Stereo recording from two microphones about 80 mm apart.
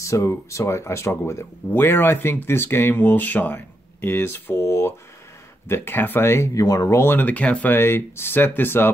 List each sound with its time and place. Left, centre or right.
0.0 s speech: left
6.5 s speech: left
7.0 s speech: left